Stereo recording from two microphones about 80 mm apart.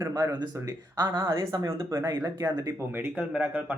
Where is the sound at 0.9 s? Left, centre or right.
Right.